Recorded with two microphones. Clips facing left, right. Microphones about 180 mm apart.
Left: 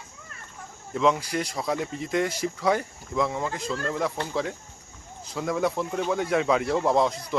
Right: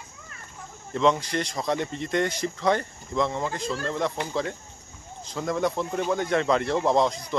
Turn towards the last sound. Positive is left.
turn(degrees=5)  # may be behind; listen again after turning